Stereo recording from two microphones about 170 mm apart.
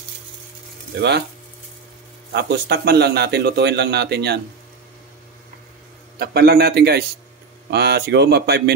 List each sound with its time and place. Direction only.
2.3 s speech: 75° right (ahead or behind)
6.1 s speech: 65° right (ahead or behind)